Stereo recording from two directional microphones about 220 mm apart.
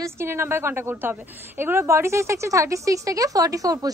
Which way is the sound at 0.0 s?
10° right (ahead or behind).